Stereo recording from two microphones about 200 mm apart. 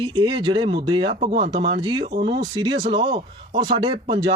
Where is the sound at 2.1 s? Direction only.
55° right (ahead or behind).